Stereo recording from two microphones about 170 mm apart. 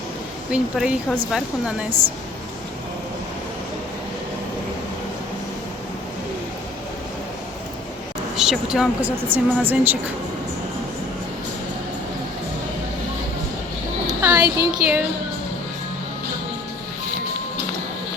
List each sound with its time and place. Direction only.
0.5 s a woman's voice: 5° right (ahead or behind)
1.9 s a woman's voice: 30° right (ahead or behind)
8.4 s a woman's voice: 5° right (ahead or behind)
14.1 s speech: 10° right (ahead or behind)